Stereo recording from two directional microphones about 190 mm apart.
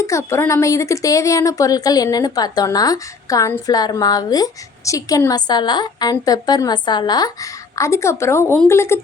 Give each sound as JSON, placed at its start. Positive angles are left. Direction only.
{"t": 0.0, "sound": "speech", "side_deg": 15}